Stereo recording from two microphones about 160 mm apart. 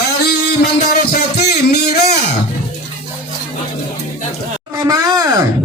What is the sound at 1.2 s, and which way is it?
Speech, 85° left.